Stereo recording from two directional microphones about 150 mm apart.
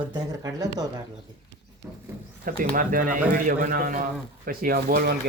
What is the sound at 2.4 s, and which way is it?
A man's voice, 70° right (ahead or behind).